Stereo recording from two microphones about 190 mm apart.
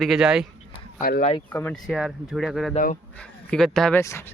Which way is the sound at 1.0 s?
50° left (ahead or behind).